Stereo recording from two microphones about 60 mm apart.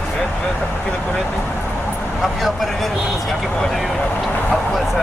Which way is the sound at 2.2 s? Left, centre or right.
Centre.